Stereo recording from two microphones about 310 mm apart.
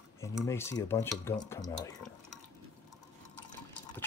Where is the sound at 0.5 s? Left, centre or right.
Centre.